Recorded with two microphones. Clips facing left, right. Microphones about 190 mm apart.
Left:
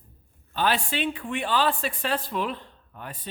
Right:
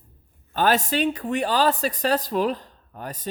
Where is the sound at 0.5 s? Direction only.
45° right (ahead or behind).